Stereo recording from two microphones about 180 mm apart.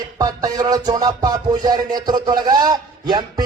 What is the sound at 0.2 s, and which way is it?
Music, 20° right (ahead or behind).